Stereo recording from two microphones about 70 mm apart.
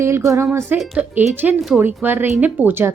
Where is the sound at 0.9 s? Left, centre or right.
Right.